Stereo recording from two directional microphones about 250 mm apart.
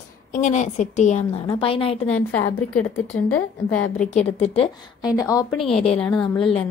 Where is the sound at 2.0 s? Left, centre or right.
Centre.